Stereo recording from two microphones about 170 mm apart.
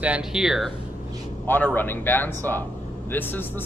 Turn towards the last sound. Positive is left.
turn(degrees=10)  # may be behind; listen again after turning